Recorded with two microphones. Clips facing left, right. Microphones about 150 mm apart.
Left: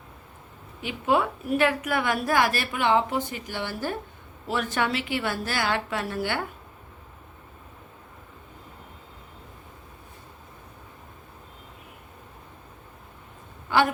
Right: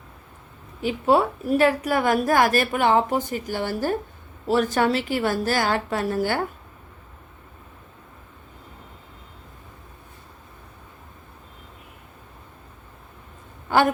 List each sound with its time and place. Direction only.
0.8 s a woman's voice: 40° right (ahead or behind)